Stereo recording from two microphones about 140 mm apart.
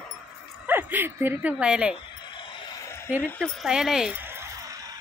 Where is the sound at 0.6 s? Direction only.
15° right (ahead or behind).